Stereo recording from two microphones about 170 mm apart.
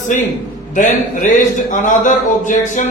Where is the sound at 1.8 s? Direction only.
50° left (ahead or behind).